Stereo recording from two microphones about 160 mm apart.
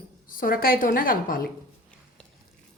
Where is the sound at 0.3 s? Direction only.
60° left (ahead or behind).